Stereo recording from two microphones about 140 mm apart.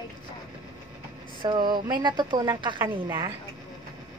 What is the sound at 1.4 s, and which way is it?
Speech, 30° right (ahead or behind).